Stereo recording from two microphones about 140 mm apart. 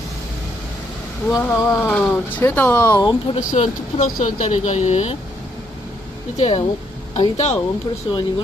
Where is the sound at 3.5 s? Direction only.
60° left (ahead or behind).